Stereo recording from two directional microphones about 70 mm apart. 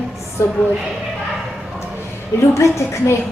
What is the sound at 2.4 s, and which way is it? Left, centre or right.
Speech, left.